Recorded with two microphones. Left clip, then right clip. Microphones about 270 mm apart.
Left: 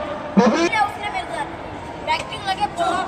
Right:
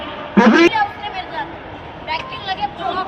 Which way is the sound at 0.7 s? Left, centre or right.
Centre.